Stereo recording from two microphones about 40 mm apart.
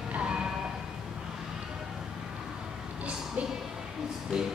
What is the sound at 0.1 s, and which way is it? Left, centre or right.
Music, right.